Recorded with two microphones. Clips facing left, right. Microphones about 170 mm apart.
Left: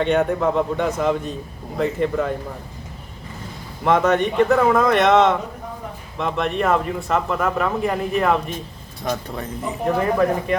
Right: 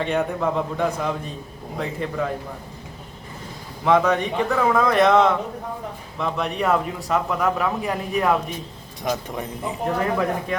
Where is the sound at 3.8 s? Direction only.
Centre (ahead or behind).